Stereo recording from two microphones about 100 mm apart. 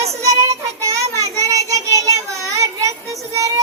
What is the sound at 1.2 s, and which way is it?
Child singing, 35° right (ahead or behind).